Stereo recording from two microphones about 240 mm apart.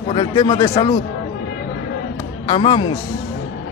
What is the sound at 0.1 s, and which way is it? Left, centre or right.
Speech, centre.